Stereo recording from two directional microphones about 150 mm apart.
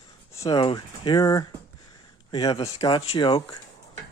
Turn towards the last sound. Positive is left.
turn(degrees=30)  # may be behind; listen again after turning